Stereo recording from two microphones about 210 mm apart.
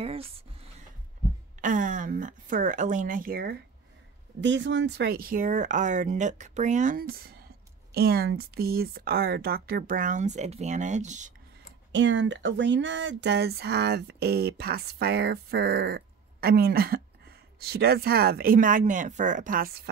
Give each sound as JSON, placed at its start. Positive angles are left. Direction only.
{"t": 0.0, "sound": "a sound", "side_deg": -30}
{"t": 1.6, "sound": "speech", "side_deg": -40}
{"t": 4.4, "sound": "speech", "side_deg": -60}
{"t": 11.9, "sound": "speech", "side_deg": -60}